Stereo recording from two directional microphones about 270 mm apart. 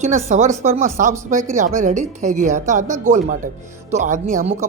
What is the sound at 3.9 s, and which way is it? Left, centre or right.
Speech, right.